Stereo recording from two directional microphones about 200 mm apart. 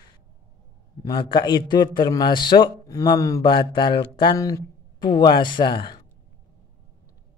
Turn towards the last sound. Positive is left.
turn(degrees=25)  # may be behind; listen again after turning